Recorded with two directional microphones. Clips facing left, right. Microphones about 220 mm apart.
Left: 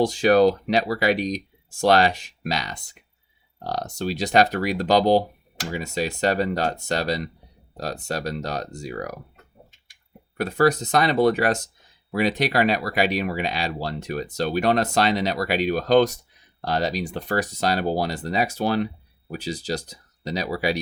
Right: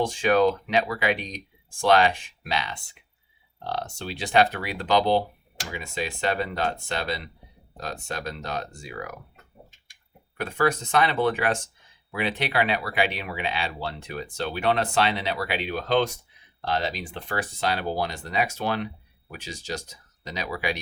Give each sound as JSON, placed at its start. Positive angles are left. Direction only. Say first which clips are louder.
{"t": 0.0, "sound": "speech", "louder": "left 4 dB", "side_deg": 40}
{"t": 10.4, "sound": "speech", "louder": "left 5 dB", "side_deg": 40}